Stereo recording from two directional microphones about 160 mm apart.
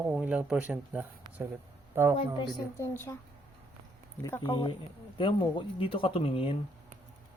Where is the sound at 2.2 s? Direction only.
30° left (ahead or behind).